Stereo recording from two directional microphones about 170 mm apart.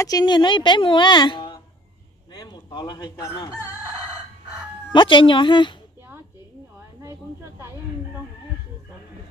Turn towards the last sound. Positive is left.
turn(degrees=-15)  # may be behind; listen again after turning